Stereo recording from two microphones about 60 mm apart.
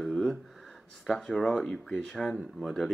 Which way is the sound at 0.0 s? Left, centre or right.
Centre.